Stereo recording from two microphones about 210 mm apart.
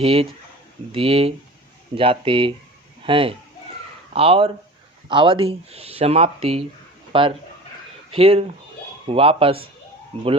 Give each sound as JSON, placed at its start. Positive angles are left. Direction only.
{"t": 0.0, "sound": "speech", "side_deg": -25}